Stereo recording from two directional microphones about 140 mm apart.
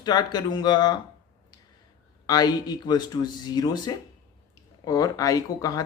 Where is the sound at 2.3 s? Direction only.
30° left (ahead or behind).